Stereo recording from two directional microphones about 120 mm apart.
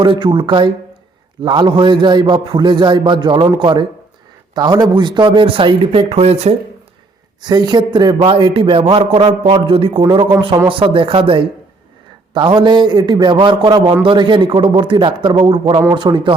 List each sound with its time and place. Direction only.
0.0 s a man's voice: 40° right (ahead or behind)
6.1 s speech: 65° right (ahead or behind)
7.4 s a man's voice: 35° right (ahead or behind)